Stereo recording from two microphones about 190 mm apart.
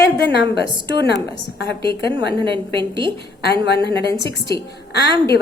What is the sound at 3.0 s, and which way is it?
A woman's voice, 60° left (ahead or behind).